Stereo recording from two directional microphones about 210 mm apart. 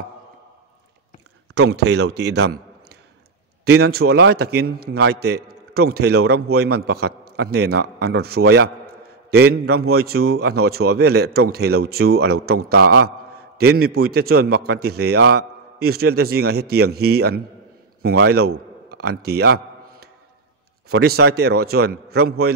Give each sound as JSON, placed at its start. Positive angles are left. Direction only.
{"t": 1.5, "sound": "a man's voice", "side_deg": -50}
{"t": 18.2, "sound": "a sound", "side_deg": -50}
{"t": 20.9, "sound": "a man's voice", "side_deg": -50}